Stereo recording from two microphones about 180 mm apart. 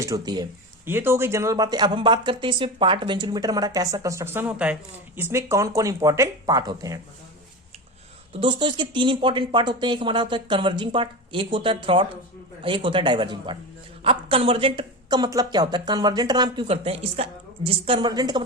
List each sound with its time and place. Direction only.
0.0 s speech: 20° right (ahead or behind)
8.3 s speech: 30° right (ahead or behind)